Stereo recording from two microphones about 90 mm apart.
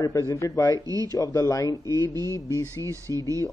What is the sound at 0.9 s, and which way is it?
Speech, 45° right (ahead or behind).